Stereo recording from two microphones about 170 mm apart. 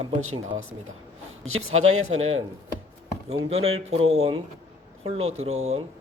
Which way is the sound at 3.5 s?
35° right (ahead or behind).